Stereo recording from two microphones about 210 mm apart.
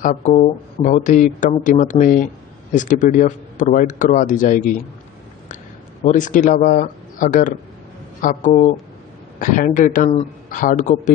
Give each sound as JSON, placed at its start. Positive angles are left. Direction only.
{"t": 0.0, "sound": "speech", "side_deg": 35}
{"t": 6.0, "sound": "speech", "side_deg": 40}